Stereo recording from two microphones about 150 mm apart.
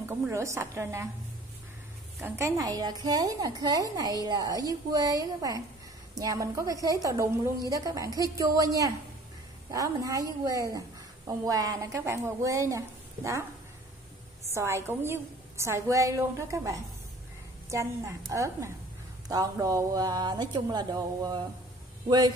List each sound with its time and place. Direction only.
0.1 s a woman's voice: 20° right (ahead or behind)
2.1 s a woman's voice: 20° right (ahead or behind)
14.5 s a woman's voice: 20° right (ahead or behind)